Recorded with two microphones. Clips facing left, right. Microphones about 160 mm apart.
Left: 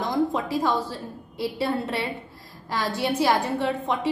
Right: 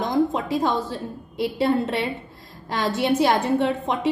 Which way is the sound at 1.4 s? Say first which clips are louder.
Right 5 dB; 20° right (ahead or behind).